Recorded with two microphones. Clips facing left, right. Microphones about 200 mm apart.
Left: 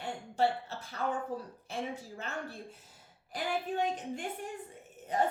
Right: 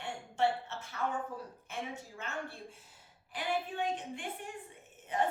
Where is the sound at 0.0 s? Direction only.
35° left (ahead or behind).